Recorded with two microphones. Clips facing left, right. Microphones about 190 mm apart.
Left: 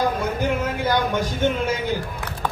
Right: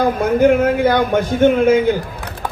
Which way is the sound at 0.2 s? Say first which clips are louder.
Right 11 dB; 55° right (ahead or behind).